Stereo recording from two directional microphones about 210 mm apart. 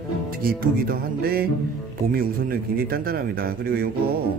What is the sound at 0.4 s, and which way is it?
Speech, 45° right (ahead or behind).